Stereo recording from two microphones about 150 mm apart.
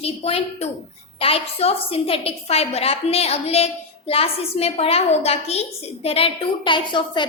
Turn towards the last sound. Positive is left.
turn(degrees=30)  # may be behind; listen again after turning